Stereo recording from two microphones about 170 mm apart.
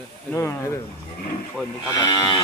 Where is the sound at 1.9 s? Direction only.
25° left (ahead or behind).